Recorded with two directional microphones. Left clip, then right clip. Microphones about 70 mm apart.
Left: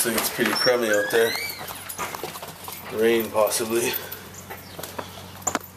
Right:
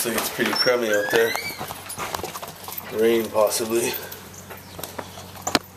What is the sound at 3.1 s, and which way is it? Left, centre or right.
Speech, centre.